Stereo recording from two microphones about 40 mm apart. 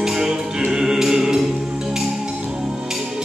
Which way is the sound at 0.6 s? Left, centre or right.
Centre.